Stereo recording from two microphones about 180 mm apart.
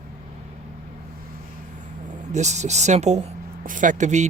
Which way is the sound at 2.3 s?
40° right (ahead or behind).